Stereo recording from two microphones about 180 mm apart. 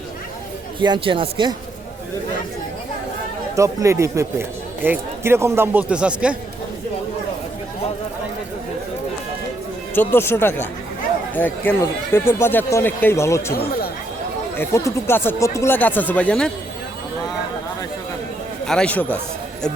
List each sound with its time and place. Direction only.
0.8 s speech: 25° right (ahead or behind)
3.5 s speech: 15° right (ahead or behind)
9.9 s speech: 10° left (ahead or behind)
14.6 s speech: 15° left (ahead or behind)
18.6 s speech: 5° left (ahead or behind)